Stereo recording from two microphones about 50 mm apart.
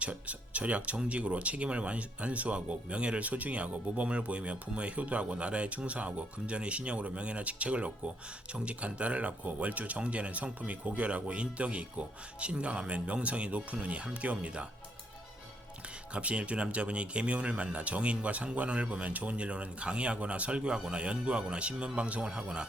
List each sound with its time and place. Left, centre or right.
0.0 s speech: right
3.2 s speech: right
16.1 s speech: right